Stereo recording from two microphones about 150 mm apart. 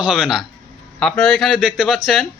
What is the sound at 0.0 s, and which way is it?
Speech, 5° right (ahead or behind).